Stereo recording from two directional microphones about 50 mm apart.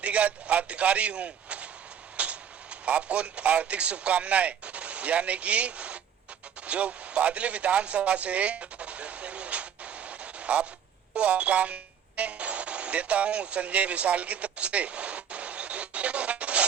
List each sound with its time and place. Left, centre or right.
0.0 s speech: right
6.7 s a sound: right
11.1 s music: right